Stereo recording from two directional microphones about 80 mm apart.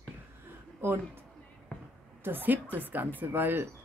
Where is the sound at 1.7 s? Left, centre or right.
Centre.